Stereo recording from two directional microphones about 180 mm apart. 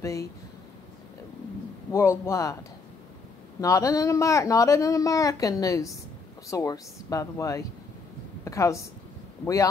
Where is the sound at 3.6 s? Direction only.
15° left (ahead or behind).